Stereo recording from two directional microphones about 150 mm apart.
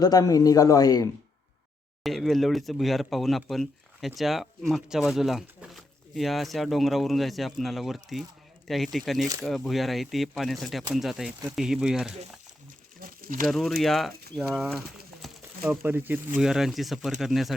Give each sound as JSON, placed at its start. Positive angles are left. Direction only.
{"t": 0.0, "sound": "speech", "side_deg": 25}
{"t": 2.0, "sound": "speech", "side_deg": 0}
{"t": 13.0, "sound": "a sound", "side_deg": -70}
{"t": 13.5, "sound": "speech", "side_deg": 0}
{"t": 15.8, "sound": "speech", "side_deg": -10}